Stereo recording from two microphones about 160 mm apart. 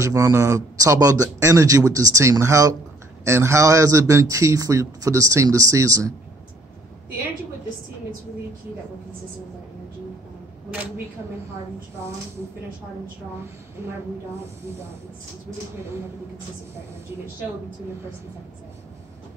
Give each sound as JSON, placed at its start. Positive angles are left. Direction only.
{"t": 0.0, "sound": "speech", "side_deg": -20}